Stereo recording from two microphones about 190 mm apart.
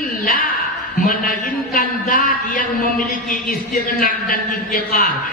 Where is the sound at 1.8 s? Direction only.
45° left (ahead or behind).